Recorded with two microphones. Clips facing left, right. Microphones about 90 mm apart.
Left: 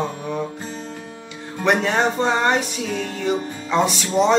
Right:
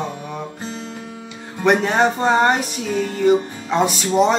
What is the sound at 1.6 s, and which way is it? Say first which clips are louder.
Music: right 2 dB; 5° right (ahead or behind).